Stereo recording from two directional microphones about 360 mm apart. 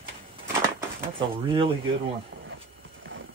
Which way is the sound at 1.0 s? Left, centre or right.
Centre.